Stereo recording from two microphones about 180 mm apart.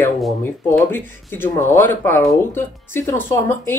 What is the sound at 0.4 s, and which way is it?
Speech, 10° left (ahead or behind).